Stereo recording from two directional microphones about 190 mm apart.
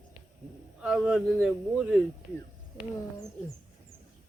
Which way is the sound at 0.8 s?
5° right (ahead or behind).